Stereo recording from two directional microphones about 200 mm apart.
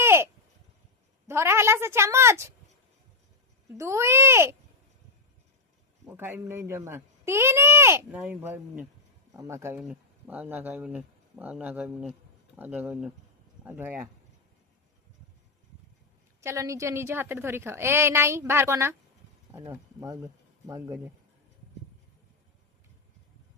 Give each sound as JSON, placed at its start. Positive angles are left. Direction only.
{"t": 0.0, "sound": "a sound", "side_deg": -10}
{"t": 1.3, "sound": "a woman's voice", "side_deg": -10}
{"t": 3.8, "sound": "a woman's voice", "side_deg": -15}
{"t": 6.1, "sound": "a woman's voice", "side_deg": -10}
{"t": 16.4, "sound": "a woman's voice", "side_deg": -15}